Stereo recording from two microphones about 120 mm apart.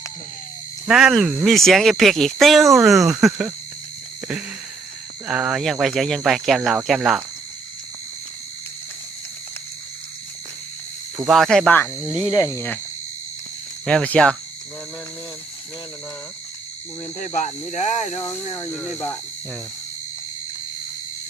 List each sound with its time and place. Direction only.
0.9 s speech: 5° right (ahead or behind)
5.3 s speech: 10° right (ahead or behind)
5.8 s speech: centre (ahead or behind)
11.3 s speech: 5° left (ahead or behind)
11.7 s speech: 20° left (ahead or behind)
12.0 s speech: 10° right (ahead or behind)
12.3 s speech: 25° left (ahead or behind)
13.8 s speech: 10° left (ahead or behind)
17.2 s speech: 90° left; by 18.2 s 75° left (ahead or behind)
18.2 s speech: 20° left (ahead or behind)